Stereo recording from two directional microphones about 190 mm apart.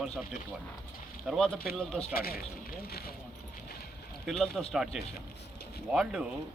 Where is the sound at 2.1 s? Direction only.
50° left (ahead or behind).